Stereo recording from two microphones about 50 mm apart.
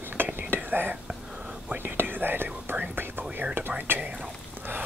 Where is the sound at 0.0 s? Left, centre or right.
Right.